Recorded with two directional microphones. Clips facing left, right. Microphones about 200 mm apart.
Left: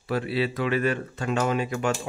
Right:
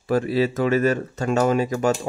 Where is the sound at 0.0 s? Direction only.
45° right (ahead or behind).